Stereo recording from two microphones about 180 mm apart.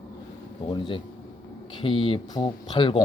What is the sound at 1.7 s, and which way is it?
Speech, 30° left (ahead or behind).